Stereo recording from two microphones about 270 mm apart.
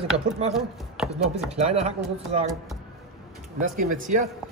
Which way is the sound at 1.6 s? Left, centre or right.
Right.